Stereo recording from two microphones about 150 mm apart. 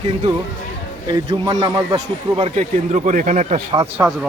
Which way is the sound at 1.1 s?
30° right (ahead or behind).